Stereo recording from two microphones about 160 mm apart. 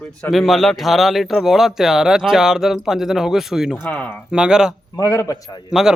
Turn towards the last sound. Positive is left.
turn(degrees=-5)  # may be behind; listen again after turning